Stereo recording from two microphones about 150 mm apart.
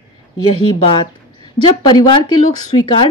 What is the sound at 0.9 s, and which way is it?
A woman's voice, 30° left (ahead or behind).